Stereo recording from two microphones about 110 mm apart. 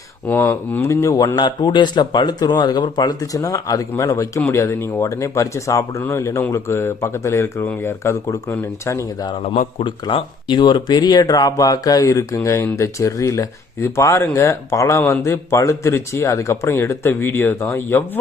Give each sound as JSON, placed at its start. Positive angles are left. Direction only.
{"t": 0.3, "sound": "speech", "side_deg": 20}
{"t": 9.8, "sound": "speech", "side_deg": 50}